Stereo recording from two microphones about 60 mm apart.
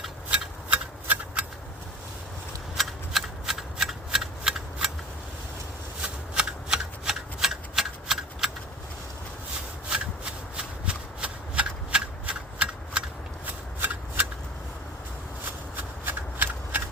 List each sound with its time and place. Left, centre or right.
1.0 s a sound: right
2.7 s shuffling cards: centre
6.0 s shuffling cards: centre
10.6 s shuffling cards: centre
13.4 s shuffling cards: right
15.7 s shuffling cards: right